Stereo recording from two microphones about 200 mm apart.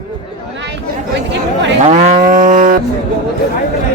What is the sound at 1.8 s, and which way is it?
Livestock, 35° right (ahead or behind).